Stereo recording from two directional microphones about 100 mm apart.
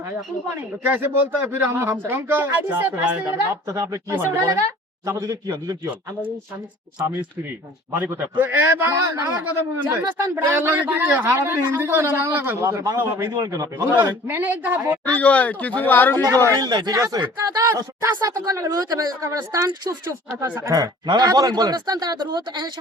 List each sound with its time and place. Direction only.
0.9 s speech: 20° right (ahead or behind)
3.2 s speech: 30° right (ahead or behind)
5.0 s speech: 40° right (ahead or behind)
7.9 s speech: 20° right (ahead or behind)
12.5 s speech: 35° right (ahead or behind)
14.3 s speech: 20° right (ahead or behind)
15.1 s speech: 15° left (ahead or behind)
16.5 s speech: 40° right (ahead or behind)